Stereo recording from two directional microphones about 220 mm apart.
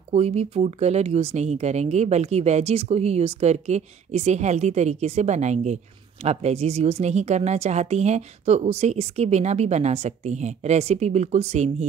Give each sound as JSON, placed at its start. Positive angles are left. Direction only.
{"t": 0.1, "sound": "a woman's voice", "side_deg": -30}